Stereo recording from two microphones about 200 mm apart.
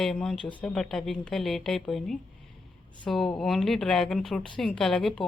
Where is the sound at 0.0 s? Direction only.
Centre (ahead or behind).